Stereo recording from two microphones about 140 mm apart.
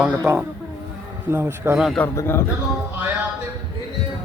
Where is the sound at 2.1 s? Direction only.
20° left (ahead or behind).